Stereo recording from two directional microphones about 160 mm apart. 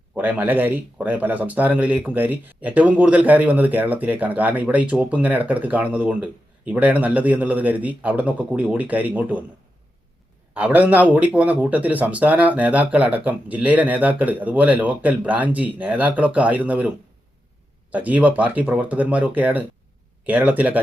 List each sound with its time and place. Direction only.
0.1 s speech: 10° right (ahead or behind)
10.5 s speech: 10° right (ahead or behind)
17.9 s speech: 10° right (ahead or behind)